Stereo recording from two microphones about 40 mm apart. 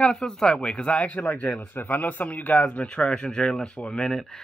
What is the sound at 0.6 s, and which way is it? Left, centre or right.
Speech, left.